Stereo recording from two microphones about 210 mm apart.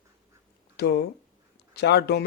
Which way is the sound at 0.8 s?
50° left (ahead or behind).